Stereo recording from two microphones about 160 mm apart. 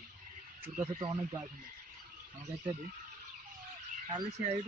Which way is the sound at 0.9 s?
25° right (ahead or behind).